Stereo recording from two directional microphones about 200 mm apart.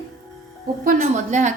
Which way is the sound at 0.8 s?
35° right (ahead or behind).